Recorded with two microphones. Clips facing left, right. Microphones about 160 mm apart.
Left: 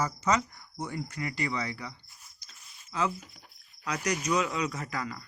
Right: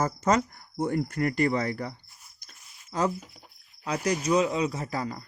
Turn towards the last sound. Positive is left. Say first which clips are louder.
# right 4 dB
turn(degrees=-35)  # may be behind; listen again after turning